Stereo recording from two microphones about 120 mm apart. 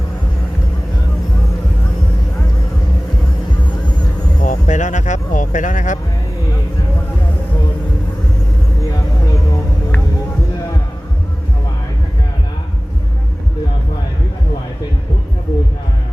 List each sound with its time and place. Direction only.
4.4 s music: 90° left